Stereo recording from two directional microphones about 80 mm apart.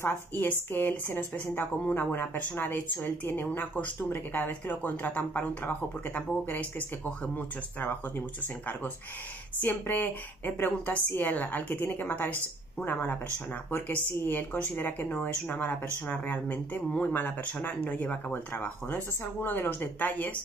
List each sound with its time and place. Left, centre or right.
0.0 s a woman's voice: left
9.6 s a woman's voice: left